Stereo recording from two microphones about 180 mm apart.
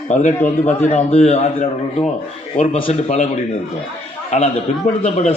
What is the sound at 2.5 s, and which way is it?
Speech, 35° left (ahead or behind).